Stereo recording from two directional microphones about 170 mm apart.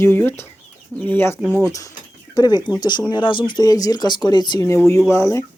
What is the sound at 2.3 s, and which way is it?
Speech, 25° left (ahead or behind).